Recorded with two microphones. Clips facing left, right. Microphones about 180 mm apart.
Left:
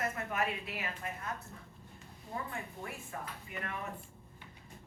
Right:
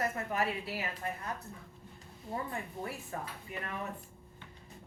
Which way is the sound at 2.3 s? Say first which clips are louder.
Right 3 dB; 35° right (ahead or behind).